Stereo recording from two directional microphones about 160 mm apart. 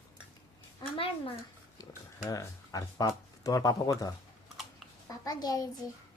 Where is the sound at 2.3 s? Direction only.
20° left (ahead or behind).